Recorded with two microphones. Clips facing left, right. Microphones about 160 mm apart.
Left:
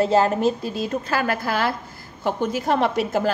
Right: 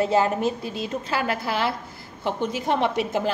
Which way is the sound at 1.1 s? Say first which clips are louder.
Left 2 dB; 50° left (ahead or behind).